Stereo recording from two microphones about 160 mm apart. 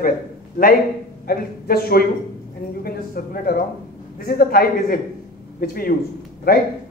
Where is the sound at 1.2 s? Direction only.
70° left (ahead or behind).